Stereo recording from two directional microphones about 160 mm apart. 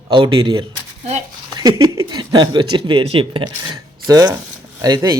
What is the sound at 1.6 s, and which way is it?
Speech, 25° right (ahead or behind).